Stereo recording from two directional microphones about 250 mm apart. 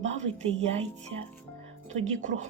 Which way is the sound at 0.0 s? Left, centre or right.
Right.